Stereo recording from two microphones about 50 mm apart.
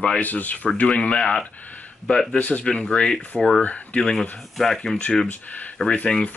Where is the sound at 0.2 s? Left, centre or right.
Left.